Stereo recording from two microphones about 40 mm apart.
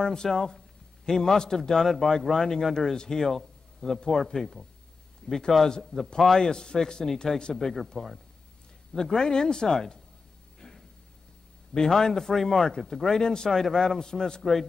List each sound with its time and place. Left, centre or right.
0.0 s a man's voice: centre
7.5 s speech: centre
8.9 s a man's voice: centre
10.6 s a sound: left
11.7 s a man's voice: centre
13.5 s a man's voice: centre